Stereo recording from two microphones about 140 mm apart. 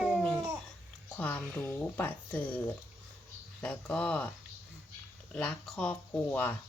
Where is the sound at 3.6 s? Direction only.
10° left (ahead or behind).